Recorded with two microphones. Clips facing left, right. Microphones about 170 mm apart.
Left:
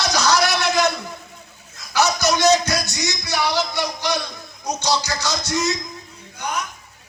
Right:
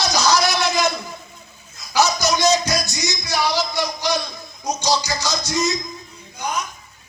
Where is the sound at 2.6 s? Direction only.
15° right (ahead or behind).